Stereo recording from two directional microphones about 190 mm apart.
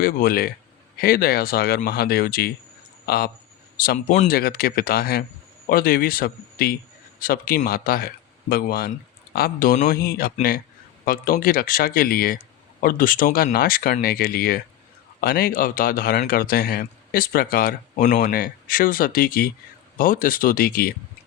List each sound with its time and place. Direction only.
0.0 s speech: 50° left (ahead or behind)
4.4 s speech: 55° left (ahead or behind)